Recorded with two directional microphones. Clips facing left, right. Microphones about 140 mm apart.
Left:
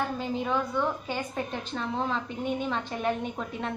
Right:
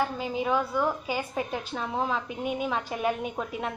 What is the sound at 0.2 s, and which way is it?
A woman's voice, 5° right (ahead or behind).